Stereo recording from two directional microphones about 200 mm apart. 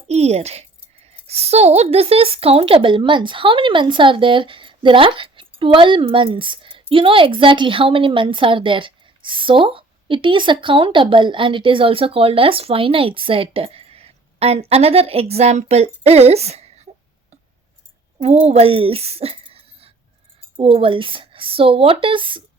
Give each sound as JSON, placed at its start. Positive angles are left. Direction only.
{"t": 0.1, "sound": "a woman's voice", "side_deg": -30}
{"t": 18.2, "sound": "a woman's voice", "side_deg": -30}